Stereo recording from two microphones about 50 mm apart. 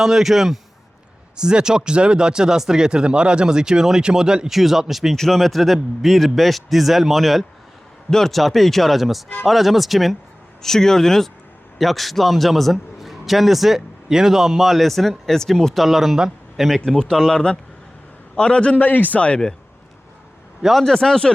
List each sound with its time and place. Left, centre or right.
0.0 s a man's voice: centre
15.8 s a man's voice: centre; by 19.2 s left
20.7 s speech: centre